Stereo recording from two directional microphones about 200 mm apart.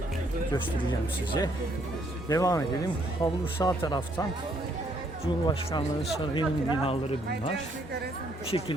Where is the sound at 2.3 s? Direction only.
15° left (ahead or behind).